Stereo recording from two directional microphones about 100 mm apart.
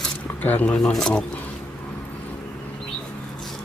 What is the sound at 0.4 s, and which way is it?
Speech, 15° left (ahead or behind).